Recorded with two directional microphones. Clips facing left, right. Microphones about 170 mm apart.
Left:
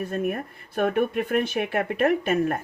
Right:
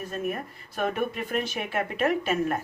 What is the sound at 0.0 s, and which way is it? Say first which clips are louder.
Speech: left 4 dB; 55° left (ahead or behind).